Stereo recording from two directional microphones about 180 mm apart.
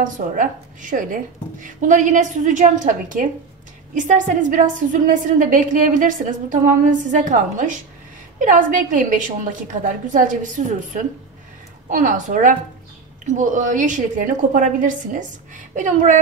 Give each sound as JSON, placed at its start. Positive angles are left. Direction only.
{"t": 0.0, "sound": "a woman's voice", "side_deg": -45}